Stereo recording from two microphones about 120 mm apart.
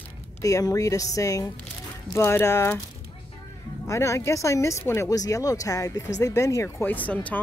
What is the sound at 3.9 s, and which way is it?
A woman's voice, 25° left (ahead or behind).